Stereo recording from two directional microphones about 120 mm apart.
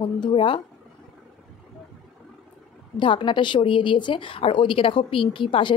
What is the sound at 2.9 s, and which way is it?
Speech, 40° left (ahead or behind).